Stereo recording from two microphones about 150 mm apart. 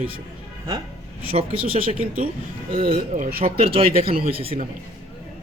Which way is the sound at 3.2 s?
90° right.